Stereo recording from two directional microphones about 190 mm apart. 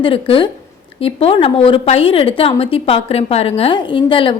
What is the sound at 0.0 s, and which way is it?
A woman's voice, 30° left (ahead or behind).